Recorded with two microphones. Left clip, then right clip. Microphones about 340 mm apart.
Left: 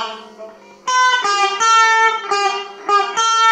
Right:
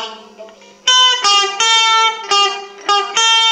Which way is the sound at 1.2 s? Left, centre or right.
Right.